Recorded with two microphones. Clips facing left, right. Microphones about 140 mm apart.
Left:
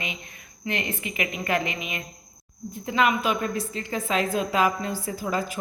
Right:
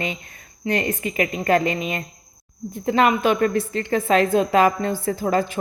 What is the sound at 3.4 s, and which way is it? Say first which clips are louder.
A woman's voice: right 8 dB; 65° right (ahead or behind).